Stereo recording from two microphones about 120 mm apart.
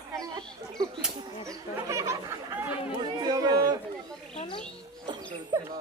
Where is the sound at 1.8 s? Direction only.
25° right (ahead or behind).